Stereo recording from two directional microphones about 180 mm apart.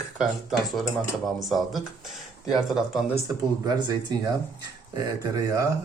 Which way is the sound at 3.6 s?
25° right (ahead or behind).